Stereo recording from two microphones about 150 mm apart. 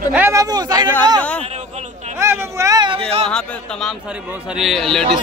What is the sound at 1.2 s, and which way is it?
Speech, 10° left (ahead or behind).